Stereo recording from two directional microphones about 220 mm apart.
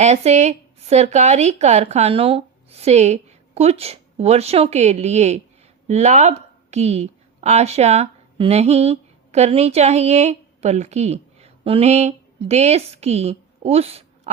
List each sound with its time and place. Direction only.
0.0 s speech: 30° right (ahead or behind)